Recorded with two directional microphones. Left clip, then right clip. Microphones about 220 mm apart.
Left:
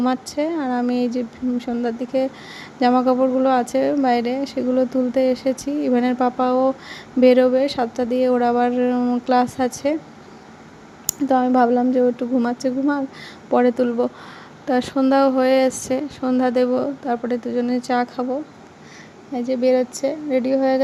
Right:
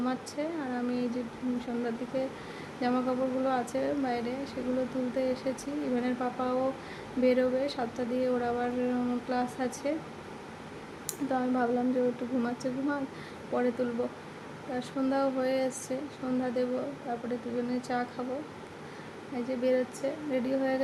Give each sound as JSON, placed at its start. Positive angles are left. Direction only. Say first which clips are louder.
{"t": 0.0, "sound": "speech", "louder": "left 12 dB", "side_deg": 35}
{"t": 11.0, "sound": "speech", "louder": "left 13 dB", "side_deg": 35}
{"t": 19.5, "sound": "speech", "louder": "left 11 dB", "side_deg": 30}